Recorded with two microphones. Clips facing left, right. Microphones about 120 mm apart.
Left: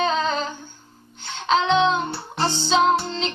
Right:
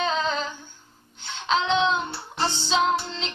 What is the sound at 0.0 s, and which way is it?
Humming, 45° left (ahead or behind).